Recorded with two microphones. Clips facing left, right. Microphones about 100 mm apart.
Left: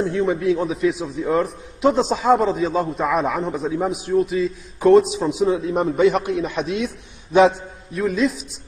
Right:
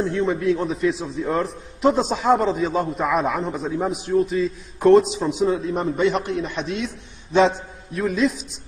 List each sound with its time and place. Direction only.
0.0 s a man's voice: 5° left (ahead or behind)